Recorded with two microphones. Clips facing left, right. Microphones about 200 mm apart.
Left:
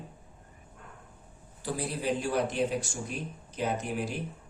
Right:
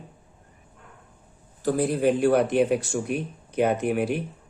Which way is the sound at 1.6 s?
50° right (ahead or behind).